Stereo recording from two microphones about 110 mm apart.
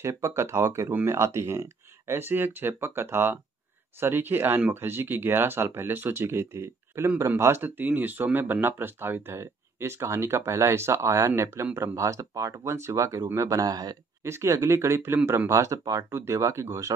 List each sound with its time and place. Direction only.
0.1 s speech: 25° right (ahead or behind)
14.2 s speech: 25° right (ahead or behind)